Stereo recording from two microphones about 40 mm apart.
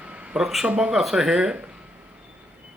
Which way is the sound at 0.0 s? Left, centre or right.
Right.